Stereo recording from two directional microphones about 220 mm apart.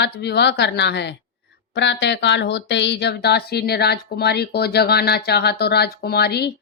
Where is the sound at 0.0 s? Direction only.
50° left (ahead or behind).